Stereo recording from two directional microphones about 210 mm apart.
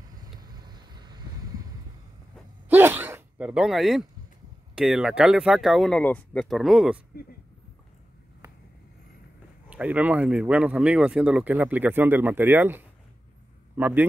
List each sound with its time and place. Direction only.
0.2 s vehicle: 20° right (ahead or behind)
2.7 s gasp: 10° right (ahead or behind)
4.7 s speech: centre (ahead or behind)
9.7 s speech: 5° right (ahead or behind)